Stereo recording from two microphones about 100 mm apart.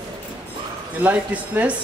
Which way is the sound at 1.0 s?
15° right (ahead or behind).